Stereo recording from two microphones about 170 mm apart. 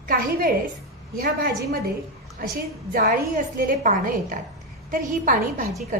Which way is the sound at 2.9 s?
55° right (ahead or behind).